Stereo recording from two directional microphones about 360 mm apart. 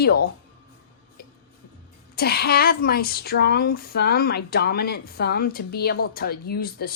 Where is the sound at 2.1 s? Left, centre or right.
Left.